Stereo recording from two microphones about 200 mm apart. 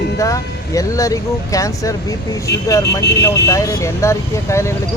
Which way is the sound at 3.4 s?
15° left (ahead or behind).